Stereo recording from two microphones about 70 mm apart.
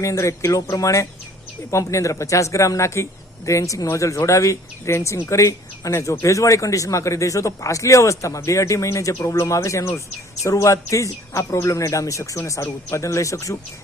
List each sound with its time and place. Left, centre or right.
0.0 s speech: left